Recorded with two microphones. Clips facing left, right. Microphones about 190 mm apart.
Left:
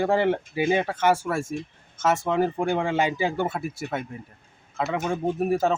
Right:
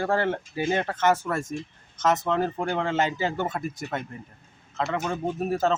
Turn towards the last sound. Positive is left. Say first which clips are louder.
# left 2 dB
turn(degrees=15)  # may be behind; listen again after turning